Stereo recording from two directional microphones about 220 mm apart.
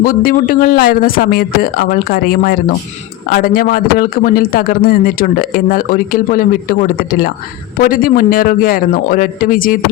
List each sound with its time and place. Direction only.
0.0 s a man's voice: 40° left (ahead or behind)